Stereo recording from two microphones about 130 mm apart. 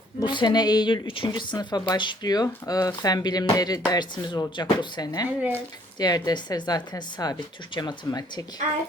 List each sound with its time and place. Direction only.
0.2 s speech: 35° left (ahead or behind)